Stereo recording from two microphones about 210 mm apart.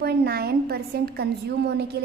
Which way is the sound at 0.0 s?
50° right (ahead or behind).